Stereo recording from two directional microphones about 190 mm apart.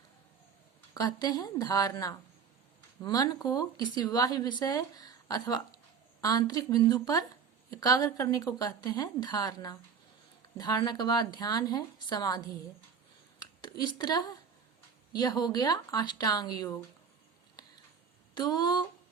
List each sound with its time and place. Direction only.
0.9 s speech: 20° left (ahead or behind)
18.3 s speech: 20° left (ahead or behind)